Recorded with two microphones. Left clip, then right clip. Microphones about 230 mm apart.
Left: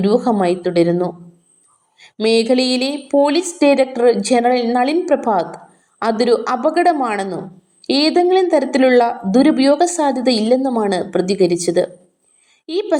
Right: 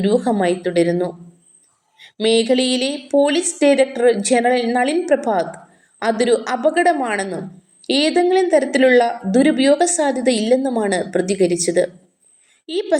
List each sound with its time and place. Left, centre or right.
0.0 s a woman's voice: left
2.1 s a woman's voice: left